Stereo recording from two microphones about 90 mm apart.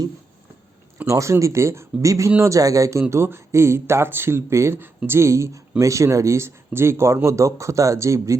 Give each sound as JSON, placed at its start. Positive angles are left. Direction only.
{"t": 1.0, "sound": "speech", "side_deg": -35}